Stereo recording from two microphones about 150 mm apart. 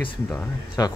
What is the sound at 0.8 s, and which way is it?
Speech, 25° left (ahead or behind).